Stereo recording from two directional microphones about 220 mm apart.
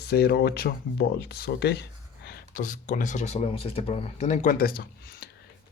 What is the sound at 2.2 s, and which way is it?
Speech, 35° left (ahead or behind).